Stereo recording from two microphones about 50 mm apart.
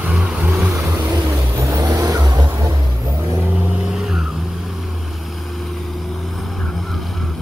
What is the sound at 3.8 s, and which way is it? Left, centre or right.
Vehicle, centre.